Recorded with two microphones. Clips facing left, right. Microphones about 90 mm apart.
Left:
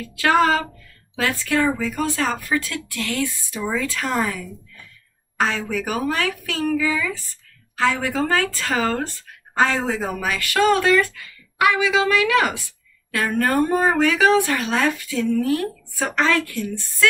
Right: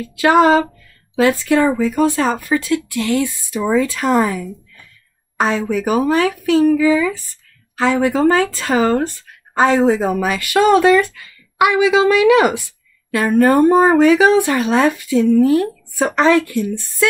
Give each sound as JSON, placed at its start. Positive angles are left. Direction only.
{"t": 0.0, "sound": "a woman's voice", "side_deg": -20}